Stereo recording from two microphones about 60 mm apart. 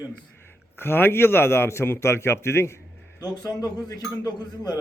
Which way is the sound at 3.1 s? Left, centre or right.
Left.